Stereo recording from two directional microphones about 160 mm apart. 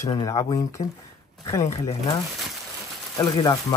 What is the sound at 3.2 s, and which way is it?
Speech, 25° left (ahead or behind).